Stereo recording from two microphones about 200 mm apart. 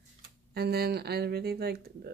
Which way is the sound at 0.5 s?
50° right (ahead or behind).